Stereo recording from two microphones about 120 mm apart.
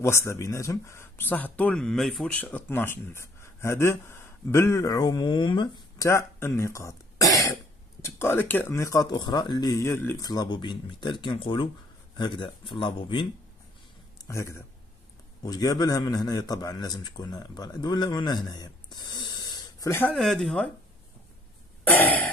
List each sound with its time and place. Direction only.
0.0 s speech: 20° left (ahead or behind); by 2.2 s centre (ahead or behind)
2.3 s speech: 15° left (ahead or behind); by 5.9 s 40° left (ahead or behind)
5.9 s throat clearing: 25° left (ahead or behind)
8.0 s speech: 20° left (ahead or behind)
10.2 s speech: 35° left (ahead or behind)
14.1 s a sound: 25° left (ahead or behind)
15.4 s a man's voice: 30° left (ahead or behind)
19.9 s speech: 15° left (ahead or behind)
20.2 s speech: 5° left (ahead or behind)
21.8 s throat clearing: 15° left (ahead or behind)